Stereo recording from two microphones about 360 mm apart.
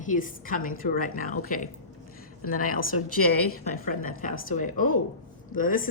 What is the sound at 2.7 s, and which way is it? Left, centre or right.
A woman's voice, left.